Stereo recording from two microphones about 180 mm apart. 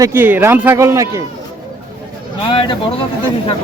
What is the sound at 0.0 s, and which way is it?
Speech, 10° right (ahead or behind).